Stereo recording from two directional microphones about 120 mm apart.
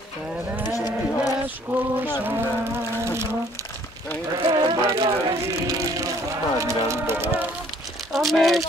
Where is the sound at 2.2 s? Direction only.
20° right (ahead or behind).